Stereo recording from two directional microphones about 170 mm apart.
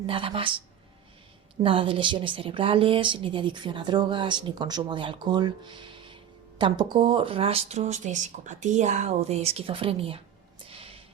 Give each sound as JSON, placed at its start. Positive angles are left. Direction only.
{"t": 0.0, "sound": "speech", "side_deg": -30}
{"t": 1.6, "sound": "a woman's voice", "side_deg": -30}
{"t": 10.7, "sound": "a sound", "side_deg": -35}